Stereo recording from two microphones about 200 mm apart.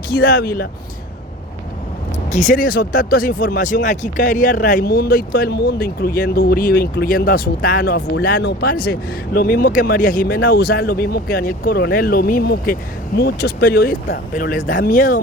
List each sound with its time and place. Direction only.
0.1 s speech: 50° left (ahead or behind)
2.3 s speech: 40° left (ahead or behind)